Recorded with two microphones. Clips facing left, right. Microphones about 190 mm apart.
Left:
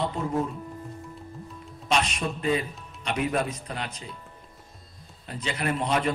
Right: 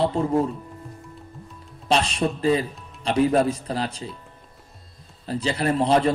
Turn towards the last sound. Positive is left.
turn(degrees=-30)  # may be behind; listen again after turning